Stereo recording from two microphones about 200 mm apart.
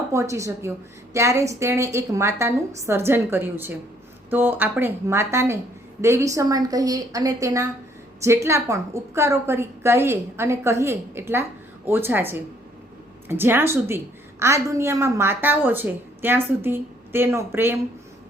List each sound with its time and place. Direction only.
0.1 s a woman's voice: 15° right (ahead or behind)